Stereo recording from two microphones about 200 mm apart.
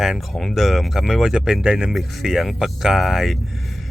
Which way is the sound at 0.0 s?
Centre (ahead or behind).